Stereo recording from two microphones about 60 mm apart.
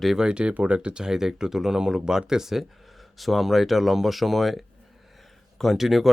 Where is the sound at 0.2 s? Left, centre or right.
Centre.